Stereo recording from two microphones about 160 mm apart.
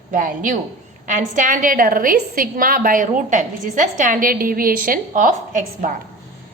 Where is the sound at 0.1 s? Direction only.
55° right (ahead or behind).